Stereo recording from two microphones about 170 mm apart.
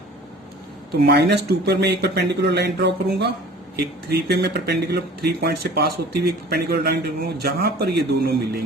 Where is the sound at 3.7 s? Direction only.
70° right (ahead or behind).